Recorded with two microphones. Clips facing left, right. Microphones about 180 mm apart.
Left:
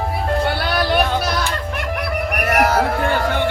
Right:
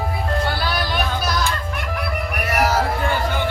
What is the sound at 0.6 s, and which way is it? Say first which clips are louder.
Music: left 5 dB; 65° left (ahead or behind).